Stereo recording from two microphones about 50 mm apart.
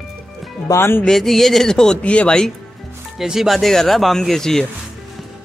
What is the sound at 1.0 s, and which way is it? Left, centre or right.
Speech, centre.